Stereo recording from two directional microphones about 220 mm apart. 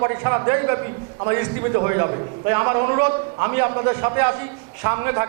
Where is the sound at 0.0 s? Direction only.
20° right (ahead or behind).